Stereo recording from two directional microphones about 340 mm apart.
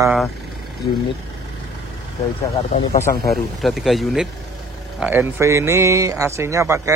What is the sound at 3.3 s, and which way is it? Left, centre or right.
Speech, centre.